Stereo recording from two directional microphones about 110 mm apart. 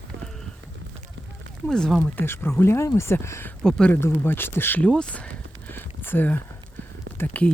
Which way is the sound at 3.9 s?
20° left (ahead or behind).